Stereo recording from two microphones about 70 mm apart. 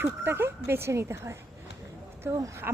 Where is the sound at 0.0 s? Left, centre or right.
Right.